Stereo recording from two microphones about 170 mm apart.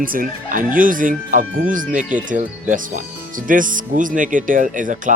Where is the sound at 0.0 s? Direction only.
55° right (ahead or behind).